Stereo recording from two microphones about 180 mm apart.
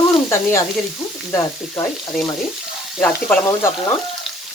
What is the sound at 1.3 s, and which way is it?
Frying, 20° left (ahead or behind).